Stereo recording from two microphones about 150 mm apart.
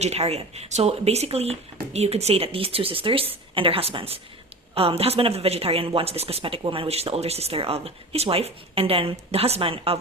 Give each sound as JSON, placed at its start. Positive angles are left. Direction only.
{"t": 0.0, "sound": "speech", "side_deg": -45}